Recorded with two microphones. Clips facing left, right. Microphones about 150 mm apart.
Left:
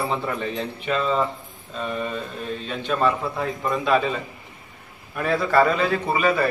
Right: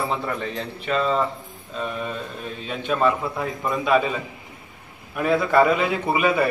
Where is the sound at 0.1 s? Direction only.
Centre (ahead or behind).